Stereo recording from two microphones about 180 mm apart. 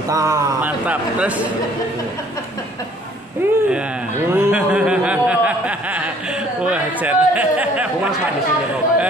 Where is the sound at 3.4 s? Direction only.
15° right (ahead or behind).